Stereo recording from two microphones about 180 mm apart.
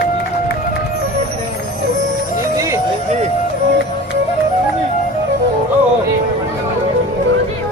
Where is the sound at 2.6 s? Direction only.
15° right (ahead or behind).